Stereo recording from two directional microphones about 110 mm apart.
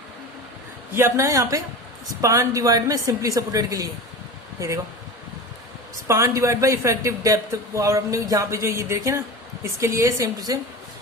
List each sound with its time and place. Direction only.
0.9 s a woman's voice: 25° right (ahead or behind)
6.1 s a woman's voice: 25° right (ahead or behind)